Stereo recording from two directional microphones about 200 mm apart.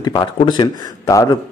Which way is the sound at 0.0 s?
20° left (ahead or behind).